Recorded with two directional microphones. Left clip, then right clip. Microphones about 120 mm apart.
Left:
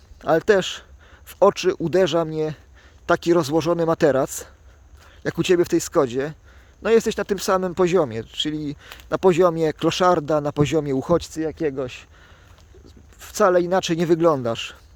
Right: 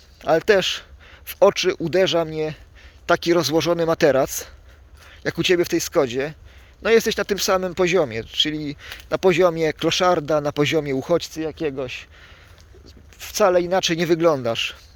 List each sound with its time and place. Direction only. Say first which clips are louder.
0.2 s speech: right 1 dB; 45° left (ahead or behind)
3.1 s speech: right 1 dB; 45° left (ahead or behind)
5.2 s speech: even; 55° left (ahead or behind)
6.8 s speech: right 1 dB; 40° left (ahead or behind); by 12.0 s 65° left (ahead or behind)
13.1 s speech: even; 55° left (ahead or behind)